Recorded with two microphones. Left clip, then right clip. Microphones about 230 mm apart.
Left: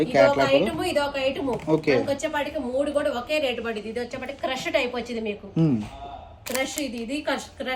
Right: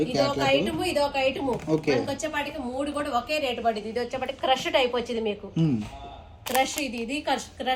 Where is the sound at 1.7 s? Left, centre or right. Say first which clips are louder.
Left 4 dB; left.